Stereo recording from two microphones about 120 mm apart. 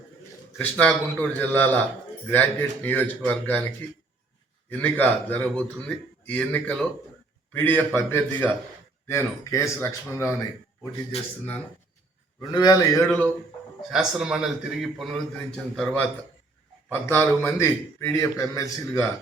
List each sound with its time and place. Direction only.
0.5 s a man's voice: 15° left (ahead or behind)
4.7 s a man's voice: 15° left (ahead or behind)
11.1 s speech: 60° left (ahead or behind)
12.4 s a man's voice: 35° left (ahead or behind)
13.0 s a man's voice: 20° left (ahead or behind)
13.9 s a man's voice: 5° right (ahead or behind)
16.9 s a man's voice: 15° left (ahead or behind)